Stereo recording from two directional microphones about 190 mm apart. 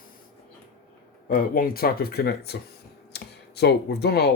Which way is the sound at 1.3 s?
50° left (ahead or behind).